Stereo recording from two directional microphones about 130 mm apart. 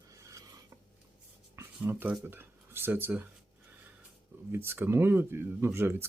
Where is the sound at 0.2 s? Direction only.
25° right (ahead or behind).